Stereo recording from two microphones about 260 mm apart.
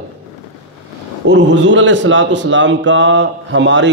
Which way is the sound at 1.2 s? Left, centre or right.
Right.